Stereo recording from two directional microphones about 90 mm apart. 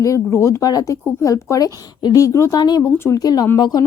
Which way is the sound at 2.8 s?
30° left (ahead or behind).